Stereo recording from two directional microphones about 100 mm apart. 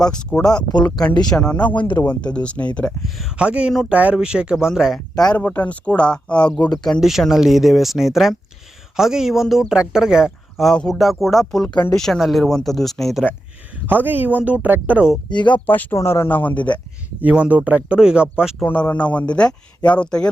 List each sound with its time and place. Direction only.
0.0 s speech: 10° left (ahead or behind)
3.2 s speech: 5° right (ahead or behind)
5.3 s speech: 15° left (ahead or behind)
7.0 s speech: 5° right (ahead or behind)
10.7 s speech: 5° left (ahead or behind)
13.8 s speech: 20° right (ahead or behind)
15.3 s speech: 50° left (ahead or behind)
15.5 s speech: 20° left (ahead or behind)
17.2 s speech: 15° right (ahead or behind)
18.6 s speech: 15° left (ahead or behind)